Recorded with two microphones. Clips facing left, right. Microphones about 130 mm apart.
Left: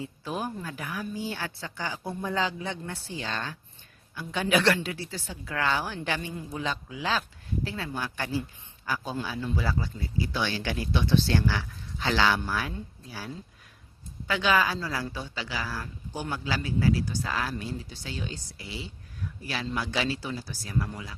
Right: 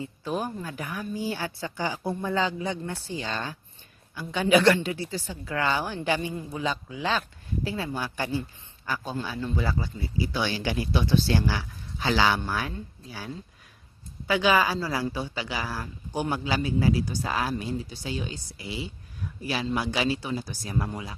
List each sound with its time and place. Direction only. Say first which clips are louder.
0.0 s speech: right 3 dB; centre (ahead or behind)
1.7 s a woman's voice: right 6 dB; 15° right (ahead or behind)
2.0 s speech: right 2 dB; centre (ahead or behind)
14.3 s a woman's voice: right 3 dB; 10° right (ahead or behind)